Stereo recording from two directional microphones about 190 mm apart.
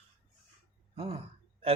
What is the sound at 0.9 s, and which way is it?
Speech, 30° right (ahead or behind).